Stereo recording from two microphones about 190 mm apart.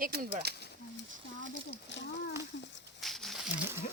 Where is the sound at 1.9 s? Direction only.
70° left (ahead or behind).